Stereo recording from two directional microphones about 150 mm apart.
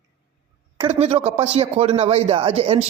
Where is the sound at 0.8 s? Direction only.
45° right (ahead or behind).